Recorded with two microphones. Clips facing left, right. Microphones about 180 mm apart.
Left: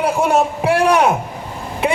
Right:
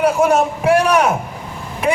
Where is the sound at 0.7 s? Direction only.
30° left (ahead or behind).